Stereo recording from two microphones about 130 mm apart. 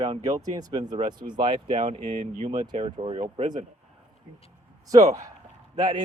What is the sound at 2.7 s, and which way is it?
Speech, 45° right (ahead or behind).